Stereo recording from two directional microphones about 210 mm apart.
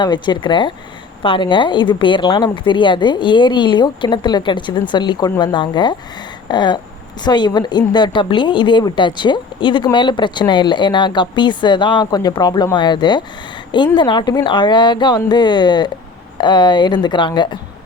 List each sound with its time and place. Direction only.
0.0 s a woman's voice: 20° left (ahead or behind)